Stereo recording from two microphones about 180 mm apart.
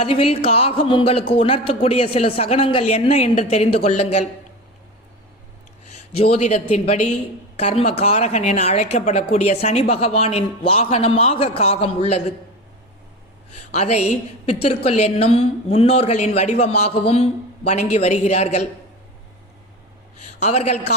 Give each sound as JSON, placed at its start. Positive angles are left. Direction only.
{"t": 0.0, "sound": "speech", "side_deg": 35}
{"t": 6.1, "sound": "speech", "side_deg": 35}
{"t": 13.7, "sound": "speech", "side_deg": 35}
{"t": 20.4, "sound": "speech", "side_deg": 35}